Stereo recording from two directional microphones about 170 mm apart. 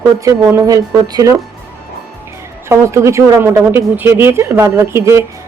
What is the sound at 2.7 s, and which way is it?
Speech, 15° right (ahead or behind).